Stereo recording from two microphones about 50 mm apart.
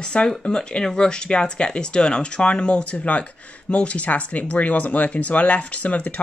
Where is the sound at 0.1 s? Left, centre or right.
Left.